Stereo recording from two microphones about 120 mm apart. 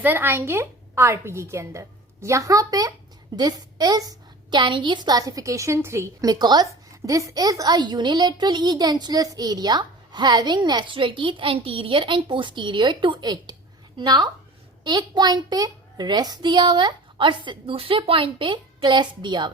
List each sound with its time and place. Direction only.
0.0 s a woman's voice: 15° right (ahead or behind); by 19.5 s 40° right (ahead or behind)